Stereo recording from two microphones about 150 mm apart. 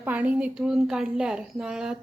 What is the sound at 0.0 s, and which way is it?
A woman's voice, 10° right (ahead or behind).